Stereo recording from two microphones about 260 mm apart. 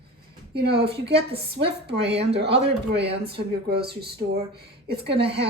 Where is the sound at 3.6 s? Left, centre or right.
Right.